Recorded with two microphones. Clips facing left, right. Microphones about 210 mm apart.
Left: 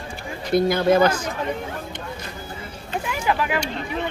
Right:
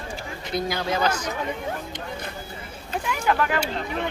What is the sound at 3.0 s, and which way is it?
Speech, 5° left (ahead or behind).